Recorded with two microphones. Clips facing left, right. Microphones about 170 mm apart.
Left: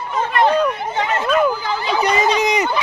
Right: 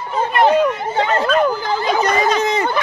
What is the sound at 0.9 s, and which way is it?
Chatter, 35° right (ahead or behind).